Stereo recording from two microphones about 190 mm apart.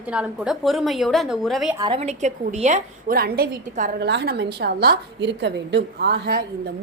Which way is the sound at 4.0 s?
60° right (ahead or behind).